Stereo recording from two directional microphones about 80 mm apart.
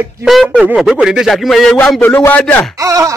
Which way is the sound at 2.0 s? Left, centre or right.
Left.